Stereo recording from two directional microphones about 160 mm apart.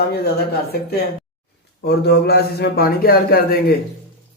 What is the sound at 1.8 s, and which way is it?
A man's voice, 85° left.